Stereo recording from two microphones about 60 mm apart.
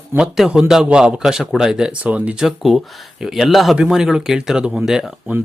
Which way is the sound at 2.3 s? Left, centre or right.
Centre.